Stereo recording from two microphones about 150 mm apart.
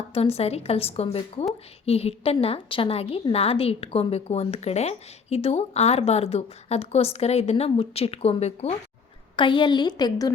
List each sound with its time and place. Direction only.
0.1 s a woman's voice: 40° left (ahead or behind)
9.3 s a woman's voice: 35° left (ahead or behind)